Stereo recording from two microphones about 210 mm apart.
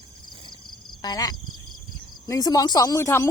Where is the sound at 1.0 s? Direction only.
20° left (ahead or behind).